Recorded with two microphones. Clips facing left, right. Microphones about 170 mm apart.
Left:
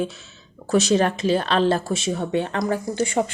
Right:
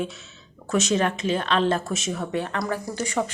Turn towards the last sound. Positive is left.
turn(degrees=25)  # may be behind; listen again after turning